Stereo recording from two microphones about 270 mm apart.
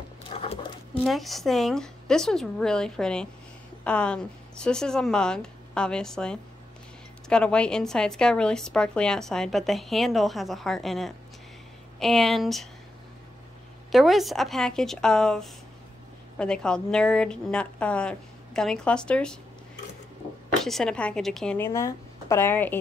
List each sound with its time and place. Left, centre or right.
0.3 s a sound: left
1.0 s speech: centre
13.9 s speech: centre
20.6 s speech: centre